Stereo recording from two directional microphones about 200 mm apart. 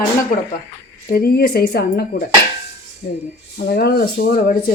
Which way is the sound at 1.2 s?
50° left (ahead or behind).